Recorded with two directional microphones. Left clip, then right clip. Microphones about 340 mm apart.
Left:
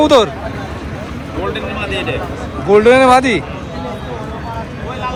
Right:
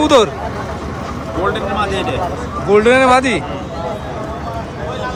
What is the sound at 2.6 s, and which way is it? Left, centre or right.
Speech, centre.